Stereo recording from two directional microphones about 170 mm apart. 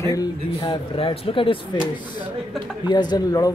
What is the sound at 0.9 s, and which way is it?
Speech, 30° left (ahead or behind).